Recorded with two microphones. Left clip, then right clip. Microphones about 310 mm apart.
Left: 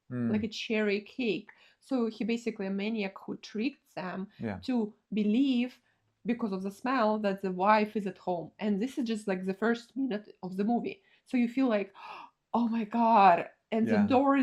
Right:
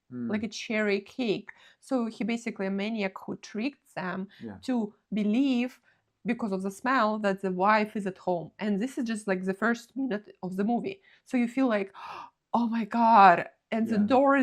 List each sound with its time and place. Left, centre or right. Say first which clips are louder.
0.3 s speech: even; right